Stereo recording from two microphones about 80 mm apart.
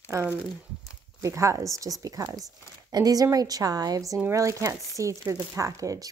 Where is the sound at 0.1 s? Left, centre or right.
Right.